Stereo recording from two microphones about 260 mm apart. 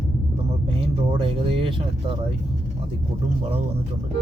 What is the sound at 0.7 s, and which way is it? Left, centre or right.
Speech, centre.